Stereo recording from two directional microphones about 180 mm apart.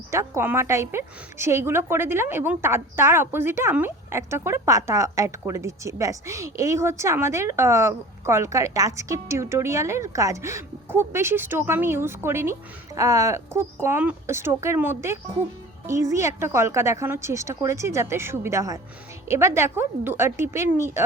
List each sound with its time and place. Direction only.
0.1 s a woman's voice: 15° right (ahead or behind)